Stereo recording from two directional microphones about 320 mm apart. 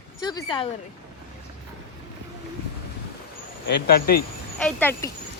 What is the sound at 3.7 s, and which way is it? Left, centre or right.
Speech, left.